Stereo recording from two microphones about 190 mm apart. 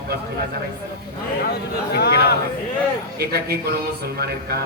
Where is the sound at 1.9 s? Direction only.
55° left (ahead or behind).